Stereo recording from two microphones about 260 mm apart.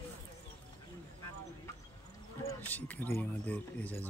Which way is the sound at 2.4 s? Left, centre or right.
Centre.